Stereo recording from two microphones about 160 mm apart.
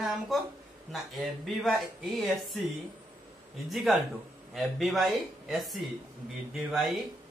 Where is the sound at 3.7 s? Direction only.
Centre (ahead or behind).